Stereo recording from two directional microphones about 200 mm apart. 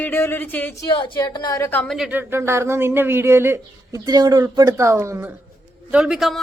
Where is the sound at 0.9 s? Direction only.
25° left (ahead or behind); by 2.0 s 5° left (ahead or behind).